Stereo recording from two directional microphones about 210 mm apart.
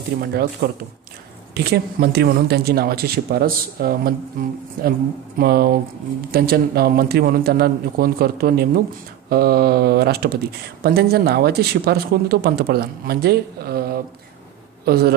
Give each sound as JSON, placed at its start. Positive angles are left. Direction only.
{"t": 0.2, "sound": "speech", "side_deg": -50}